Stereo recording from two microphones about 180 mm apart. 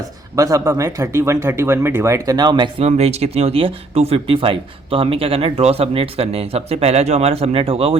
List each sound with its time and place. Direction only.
0.3 s speech: 20° right (ahead or behind)